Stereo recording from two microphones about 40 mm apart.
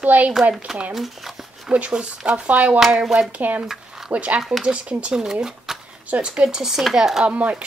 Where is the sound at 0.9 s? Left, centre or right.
Centre.